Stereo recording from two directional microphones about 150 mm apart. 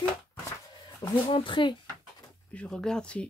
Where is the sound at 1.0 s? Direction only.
35° left (ahead or behind).